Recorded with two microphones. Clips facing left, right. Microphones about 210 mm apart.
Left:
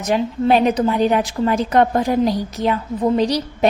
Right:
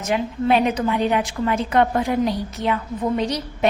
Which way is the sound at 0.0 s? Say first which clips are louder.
Left 4 dB; 35° left (ahead or behind).